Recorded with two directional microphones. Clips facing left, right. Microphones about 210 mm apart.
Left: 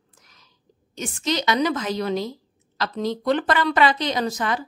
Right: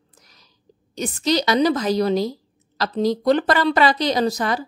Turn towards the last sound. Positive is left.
turn(degrees=-35)  # may be behind; listen again after turning